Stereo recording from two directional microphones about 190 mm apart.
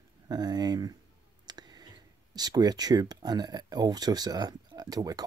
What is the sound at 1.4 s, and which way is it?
Clicking, 20° right (ahead or behind).